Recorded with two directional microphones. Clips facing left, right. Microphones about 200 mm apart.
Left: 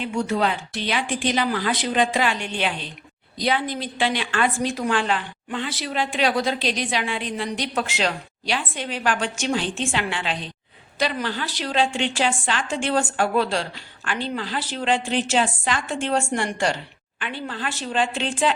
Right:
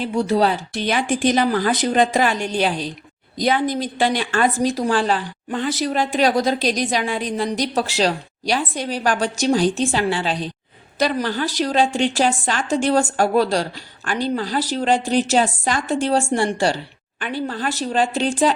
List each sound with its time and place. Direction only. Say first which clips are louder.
0.0 s a woman's voice: right 5 dB; 35° right (ahead or behind)